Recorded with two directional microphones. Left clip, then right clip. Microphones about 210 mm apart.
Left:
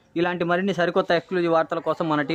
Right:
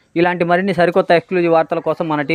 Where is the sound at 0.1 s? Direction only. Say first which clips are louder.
Right 8 dB; 25° right (ahead or behind).